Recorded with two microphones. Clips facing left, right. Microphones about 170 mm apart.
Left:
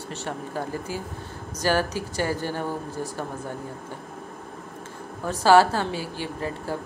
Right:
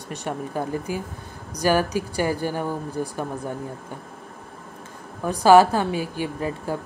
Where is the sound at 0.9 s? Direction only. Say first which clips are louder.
Right 3 dB; 15° right (ahead or behind).